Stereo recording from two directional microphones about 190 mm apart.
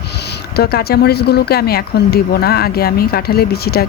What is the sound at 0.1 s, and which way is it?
Speech, 60° left (ahead or behind).